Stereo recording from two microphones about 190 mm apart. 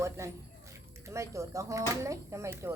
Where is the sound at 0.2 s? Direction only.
15° right (ahead or behind).